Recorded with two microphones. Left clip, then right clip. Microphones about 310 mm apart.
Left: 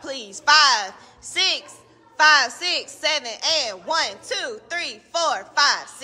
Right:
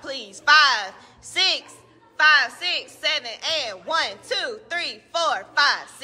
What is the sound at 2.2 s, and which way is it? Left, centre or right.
A woman's voice, centre.